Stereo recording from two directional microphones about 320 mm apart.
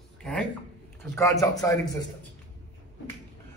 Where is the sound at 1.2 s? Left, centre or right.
Centre.